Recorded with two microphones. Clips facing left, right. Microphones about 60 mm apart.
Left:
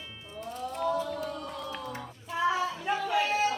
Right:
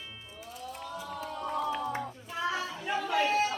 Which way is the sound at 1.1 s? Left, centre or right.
Right.